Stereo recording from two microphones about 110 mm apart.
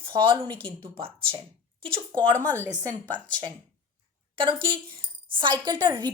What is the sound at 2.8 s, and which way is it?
Speech, 15° left (ahead or behind).